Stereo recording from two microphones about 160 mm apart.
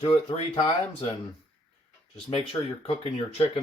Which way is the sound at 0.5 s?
35° left (ahead or behind).